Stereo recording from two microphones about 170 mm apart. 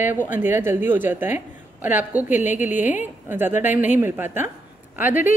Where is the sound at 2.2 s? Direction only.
45° left (ahead or behind).